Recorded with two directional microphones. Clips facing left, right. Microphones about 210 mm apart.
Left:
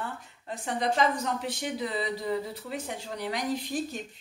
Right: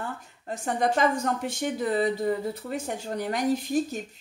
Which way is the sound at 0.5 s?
50° right (ahead or behind).